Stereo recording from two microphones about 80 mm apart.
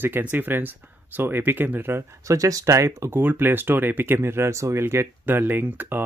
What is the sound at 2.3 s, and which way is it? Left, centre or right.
Speech, right.